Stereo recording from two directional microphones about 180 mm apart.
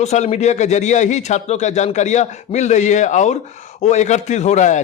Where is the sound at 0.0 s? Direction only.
40° left (ahead or behind).